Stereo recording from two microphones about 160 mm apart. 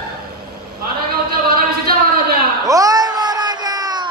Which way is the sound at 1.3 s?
70° right (ahead or behind).